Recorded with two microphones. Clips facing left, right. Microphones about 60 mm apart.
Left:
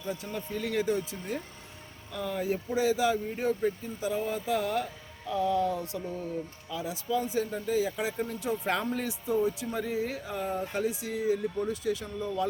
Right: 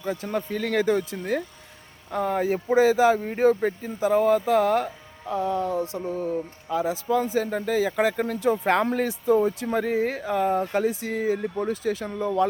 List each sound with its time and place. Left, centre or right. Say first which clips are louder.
0.0 s speech: right 8 dB; right
0.8 s speech: right 7 dB; right
2.7 s speech: right 9 dB; right
3.2 s speech: right 8 dB; right
6.1 s speech: right 7 dB; right
7.1 s speech: right 4 dB; right